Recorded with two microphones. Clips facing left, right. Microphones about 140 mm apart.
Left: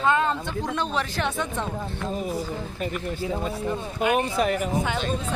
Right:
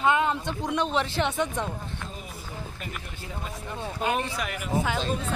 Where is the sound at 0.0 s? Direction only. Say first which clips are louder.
Left 1 dB; 15° right (ahead or behind).